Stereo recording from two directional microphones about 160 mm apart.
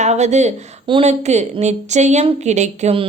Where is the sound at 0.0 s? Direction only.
45° right (ahead or behind).